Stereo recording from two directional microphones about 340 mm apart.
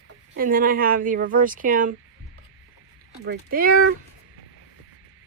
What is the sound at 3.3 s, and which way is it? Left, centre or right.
Speech, right.